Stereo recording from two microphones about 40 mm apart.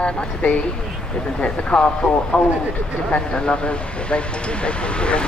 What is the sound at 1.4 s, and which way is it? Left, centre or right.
Speech, left.